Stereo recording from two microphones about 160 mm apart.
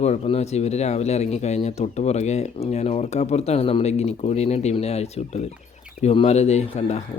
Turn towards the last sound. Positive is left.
turn(degrees=45)  # may be behind; listen again after turning